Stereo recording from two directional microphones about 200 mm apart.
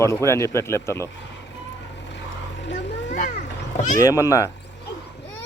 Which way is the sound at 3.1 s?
40° left (ahead or behind).